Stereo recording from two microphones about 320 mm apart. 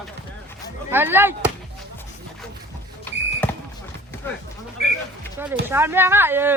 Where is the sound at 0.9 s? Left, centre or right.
Centre.